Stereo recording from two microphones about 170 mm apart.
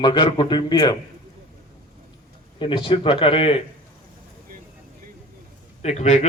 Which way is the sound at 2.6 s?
30° left (ahead or behind).